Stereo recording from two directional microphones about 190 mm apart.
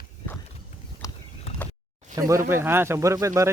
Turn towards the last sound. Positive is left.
turn(degrees=-15)  # may be behind; listen again after turning